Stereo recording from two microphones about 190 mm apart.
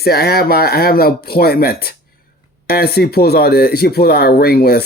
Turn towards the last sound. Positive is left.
turn(degrees=55)  # may be behind; listen again after turning